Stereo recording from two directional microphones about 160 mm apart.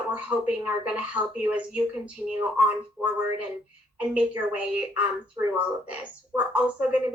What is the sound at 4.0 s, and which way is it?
A woman's voice, 10° right (ahead or behind).